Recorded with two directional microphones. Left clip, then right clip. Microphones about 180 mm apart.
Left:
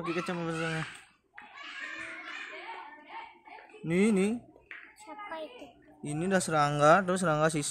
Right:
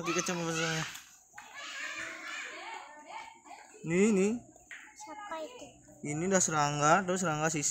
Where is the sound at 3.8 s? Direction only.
50° left (ahead or behind).